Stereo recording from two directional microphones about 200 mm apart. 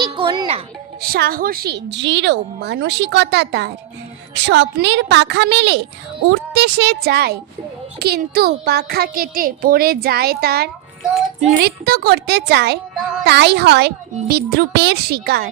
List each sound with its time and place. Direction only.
0.0 s music: 20° right (ahead or behind)
1.0 s a woman's voice: 50° right (ahead or behind)